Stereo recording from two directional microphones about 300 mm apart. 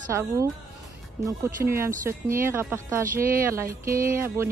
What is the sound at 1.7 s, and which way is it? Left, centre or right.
Speech, centre.